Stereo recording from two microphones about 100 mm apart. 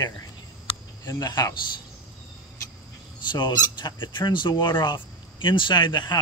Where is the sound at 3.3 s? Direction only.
50° left (ahead or behind).